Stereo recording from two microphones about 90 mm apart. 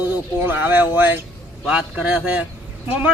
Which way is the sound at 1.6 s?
10° right (ahead or behind).